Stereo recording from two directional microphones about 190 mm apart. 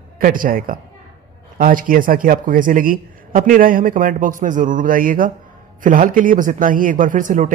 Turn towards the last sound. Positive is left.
turn(degrees=-45)  # may be behind; listen again after turning